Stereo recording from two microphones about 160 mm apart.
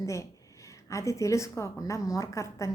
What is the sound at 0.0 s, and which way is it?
A woman's voice, 20° left (ahead or behind).